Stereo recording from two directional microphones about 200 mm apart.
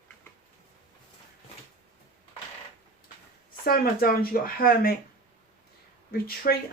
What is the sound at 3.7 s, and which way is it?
Speech, 50° left (ahead or behind).